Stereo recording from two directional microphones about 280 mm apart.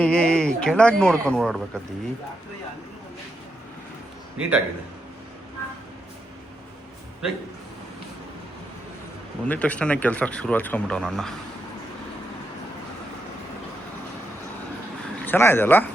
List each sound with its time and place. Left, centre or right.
0.0 s speech: centre
4.4 s speech: centre
7.2 s speech: centre
9.5 s speech: centre
15.2 s speech: centre